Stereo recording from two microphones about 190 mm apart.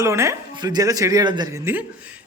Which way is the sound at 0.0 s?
15° right (ahead or behind).